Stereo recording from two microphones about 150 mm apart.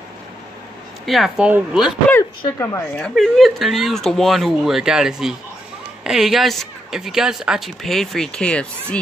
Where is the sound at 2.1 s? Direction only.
15° left (ahead or behind).